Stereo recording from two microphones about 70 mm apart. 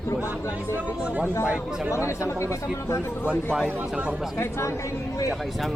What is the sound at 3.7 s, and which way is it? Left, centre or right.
Speech, right.